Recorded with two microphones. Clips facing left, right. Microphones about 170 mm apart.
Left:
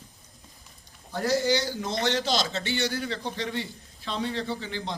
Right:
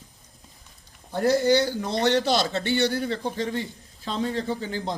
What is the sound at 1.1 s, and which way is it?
A man's voice, 55° right (ahead or behind).